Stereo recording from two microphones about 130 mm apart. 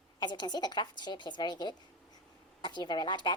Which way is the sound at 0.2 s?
35° left (ahead or behind).